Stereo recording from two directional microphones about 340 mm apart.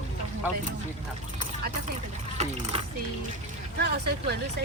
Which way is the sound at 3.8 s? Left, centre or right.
Right.